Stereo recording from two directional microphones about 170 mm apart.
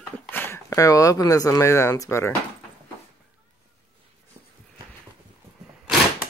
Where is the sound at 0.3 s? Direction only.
15° left (ahead or behind).